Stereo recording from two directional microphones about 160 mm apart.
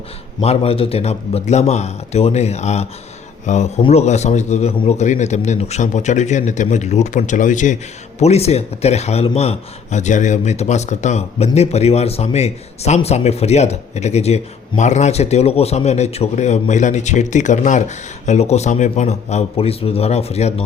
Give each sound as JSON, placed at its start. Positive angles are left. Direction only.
{"t": 0.4, "sound": "a man's voice", "side_deg": 40}